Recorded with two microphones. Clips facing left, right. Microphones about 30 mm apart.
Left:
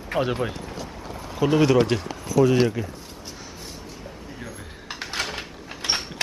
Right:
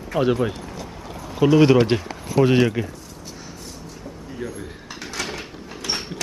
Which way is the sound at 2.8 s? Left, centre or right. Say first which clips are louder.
Right 4 dB; right.